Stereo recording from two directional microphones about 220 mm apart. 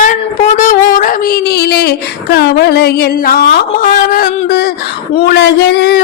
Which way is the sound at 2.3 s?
45° left (ahead or behind).